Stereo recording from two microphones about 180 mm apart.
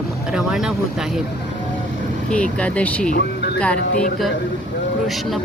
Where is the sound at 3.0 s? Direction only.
60° left (ahead or behind).